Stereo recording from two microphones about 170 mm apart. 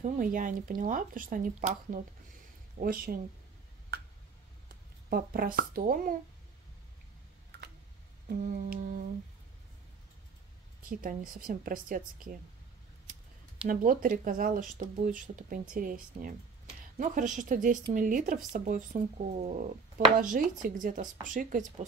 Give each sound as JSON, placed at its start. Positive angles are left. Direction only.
{"t": 0.0, "sound": "speech", "side_deg": -50}
{"t": 5.1, "sound": "speech", "side_deg": -60}
{"t": 8.4, "sound": "speech", "side_deg": -50}
{"t": 10.8, "sound": "speech", "side_deg": -55}
{"t": 13.7, "sound": "speech", "side_deg": -55}